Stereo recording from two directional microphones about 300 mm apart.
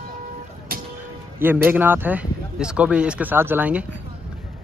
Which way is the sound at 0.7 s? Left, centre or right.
Right.